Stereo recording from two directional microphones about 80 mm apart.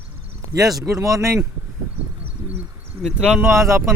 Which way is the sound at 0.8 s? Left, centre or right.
Right.